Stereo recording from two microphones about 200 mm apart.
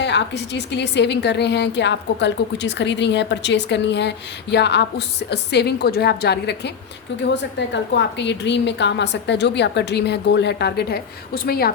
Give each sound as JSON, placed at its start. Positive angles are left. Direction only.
{"t": 0.0, "sound": "a woman's voice", "side_deg": 60}